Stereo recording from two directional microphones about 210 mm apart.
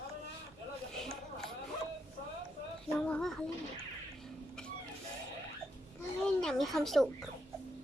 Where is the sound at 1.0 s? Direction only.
Centre (ahead or behind).